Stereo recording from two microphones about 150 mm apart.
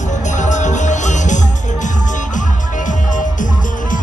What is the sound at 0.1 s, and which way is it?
Music, 55° left (ahead or behind).